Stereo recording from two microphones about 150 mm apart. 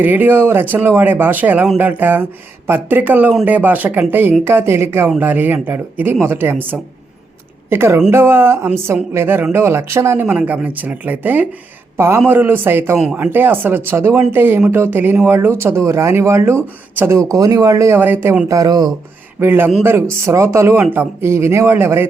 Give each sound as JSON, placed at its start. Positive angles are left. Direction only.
{"t": 0.0, "sound": "speech", "side_deg": -15}
{"t": 19.4, "sound": "speech", "side_deg": -15}